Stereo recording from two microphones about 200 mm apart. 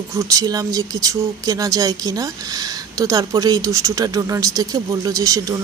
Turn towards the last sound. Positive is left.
turn(degrees=-15)  # may be behind; listen again after turning